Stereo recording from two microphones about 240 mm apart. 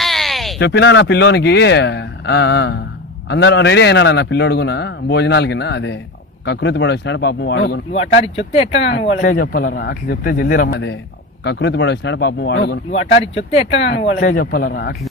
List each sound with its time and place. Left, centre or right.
0.0 s a sound: centre
0.6 s a man's voice: left
7.9 s speech: left
8.9 s a man's voice: left
9.1 s a man's voice: left
13.5 s speech: left
14.2 s a man's voice: left